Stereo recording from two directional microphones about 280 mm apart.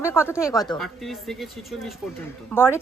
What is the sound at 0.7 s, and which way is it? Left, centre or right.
A woman's voice, centre.